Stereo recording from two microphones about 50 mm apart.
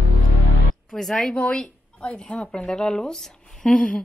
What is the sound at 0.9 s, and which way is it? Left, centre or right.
Speech, centre.